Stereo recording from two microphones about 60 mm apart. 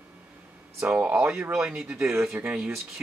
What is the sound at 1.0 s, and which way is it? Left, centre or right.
Speech, centre.